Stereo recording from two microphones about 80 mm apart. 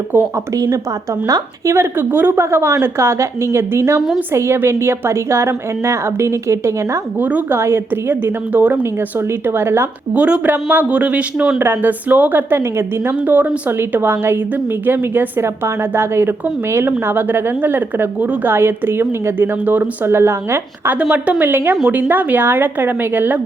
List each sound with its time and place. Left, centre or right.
0.5 s a woman's voice: right
1.6 s a woman's voice: right
7.2 s speech: centre
7.5 s a woman's voice: right
10.2 s speech: centre
10.4 s a woman's voice: right
13.2 s a woman's voice: centre
20.9 s a woman's voice: centre
21.8 s a woman's voice: centre